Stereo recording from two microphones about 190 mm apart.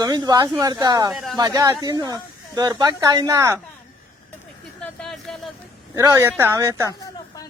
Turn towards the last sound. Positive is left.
turn(degrees=-15)  # may be behind; listen again after turning